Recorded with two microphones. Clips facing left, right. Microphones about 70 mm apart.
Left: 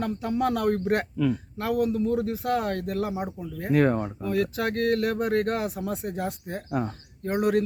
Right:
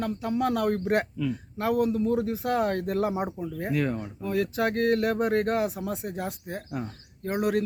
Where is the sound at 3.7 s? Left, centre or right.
Left.